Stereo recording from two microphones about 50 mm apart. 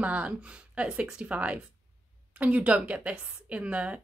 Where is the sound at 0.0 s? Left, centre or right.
Right.